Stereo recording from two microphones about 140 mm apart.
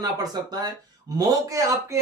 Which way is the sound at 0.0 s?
30° right (ahead or behind).